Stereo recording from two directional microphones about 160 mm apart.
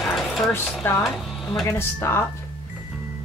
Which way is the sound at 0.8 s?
15° left (ahead or behind).